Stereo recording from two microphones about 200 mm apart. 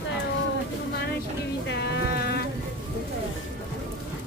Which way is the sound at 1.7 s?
60° left (ahead or behind).